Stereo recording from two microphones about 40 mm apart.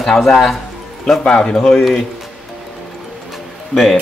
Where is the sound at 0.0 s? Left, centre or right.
Centre.